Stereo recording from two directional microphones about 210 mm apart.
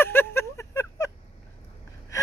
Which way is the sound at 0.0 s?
10° left (ahead or behind).